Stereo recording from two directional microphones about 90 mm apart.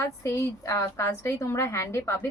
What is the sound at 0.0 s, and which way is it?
A woman's voice, 30° left (ahead or behind).